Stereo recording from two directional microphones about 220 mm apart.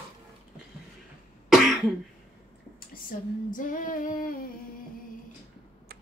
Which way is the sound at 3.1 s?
40° left (ahead or behind).